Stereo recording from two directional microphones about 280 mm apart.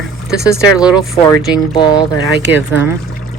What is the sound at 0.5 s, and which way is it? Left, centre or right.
Speech, centre.